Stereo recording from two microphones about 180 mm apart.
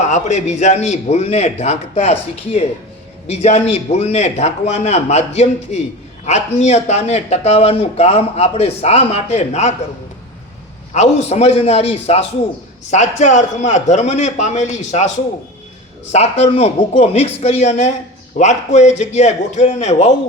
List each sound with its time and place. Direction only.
0.0 s speech: 40° left (ahead or behind)
10.9 s speech: 40° left (ahead or behind)
16.1 s speech: 35° left (ahead or behind)